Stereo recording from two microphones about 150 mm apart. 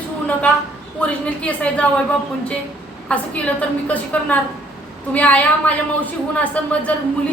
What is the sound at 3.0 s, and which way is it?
A woman's voice, 10° left (ahead or behind).